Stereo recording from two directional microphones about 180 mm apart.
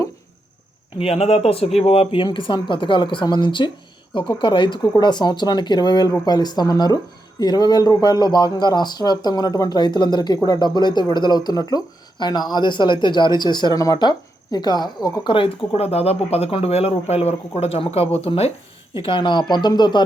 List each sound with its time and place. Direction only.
0.9 s speech: 35° left (ahead or behind)